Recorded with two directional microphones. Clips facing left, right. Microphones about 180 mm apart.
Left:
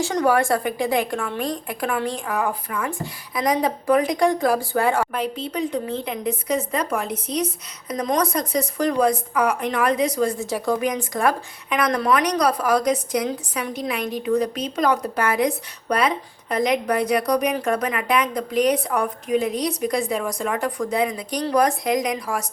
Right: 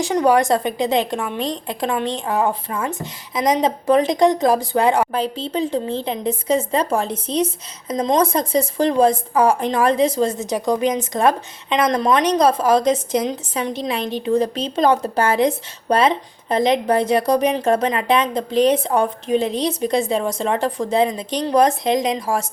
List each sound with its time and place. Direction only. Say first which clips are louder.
0.0 s speech: right 3 dB; 15° right (ahead or behind)
5.1 s speech: right 4 dB; 30° right (ahead or behind)